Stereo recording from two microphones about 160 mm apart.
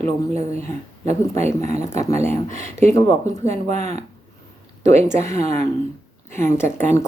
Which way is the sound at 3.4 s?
45° right (ahead or behind).